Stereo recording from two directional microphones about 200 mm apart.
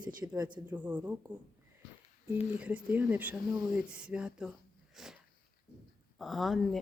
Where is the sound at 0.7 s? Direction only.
10° right (ahead or behind).